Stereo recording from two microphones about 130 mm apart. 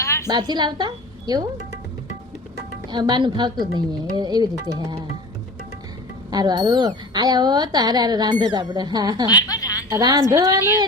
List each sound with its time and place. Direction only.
0.0 s a sound: 20° left (ahead or behind)
0.3 s a woman's voice: 30° right (ahead or behind)
2.9 s a woman's voice: 35° right (ahead or behind)
6.3 s a woman's voice: 30° right (ahead or behind)
9.2 s a sound: 30° left (ahead or behind)
9.9 s a woman's voice: 30° right (ahead or behind)